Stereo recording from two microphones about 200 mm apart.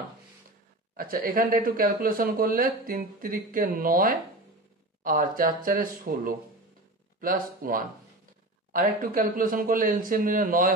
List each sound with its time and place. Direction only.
0.9 s speech: 45° right (ahead or behind)